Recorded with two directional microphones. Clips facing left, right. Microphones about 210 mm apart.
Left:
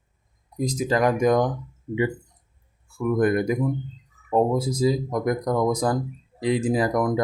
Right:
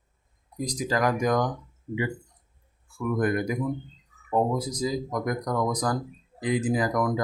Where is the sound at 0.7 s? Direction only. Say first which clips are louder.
Left 4 dB; 25° left (ahead or behind).